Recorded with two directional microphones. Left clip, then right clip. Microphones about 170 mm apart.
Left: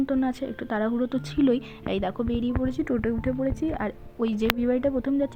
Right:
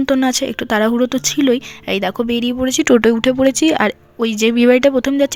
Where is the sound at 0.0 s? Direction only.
30° right (ahead or behind).